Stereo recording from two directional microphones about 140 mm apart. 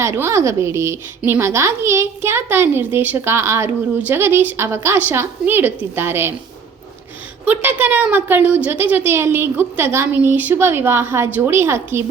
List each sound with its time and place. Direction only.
0.0 s a woman's voice: 20° right (ahead or behind)
7.4 s a woman's voice: 10° right (ahead or behind)